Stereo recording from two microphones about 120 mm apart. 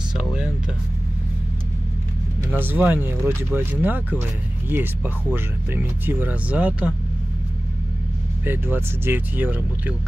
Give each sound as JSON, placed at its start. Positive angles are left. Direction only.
{"t": 0.1, "sound": "vehicle", "side_deg": -5}
{"t": 2.6, "sound": "speech", "side_deg": -15}
{"t": 8.5, "sound": "speech", "side_deg": -15}